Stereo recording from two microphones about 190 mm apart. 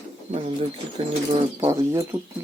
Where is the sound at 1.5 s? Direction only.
15° right (ahead or behind).